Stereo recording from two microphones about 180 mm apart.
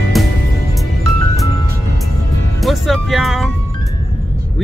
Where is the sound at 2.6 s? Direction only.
Centre (ahead or behind).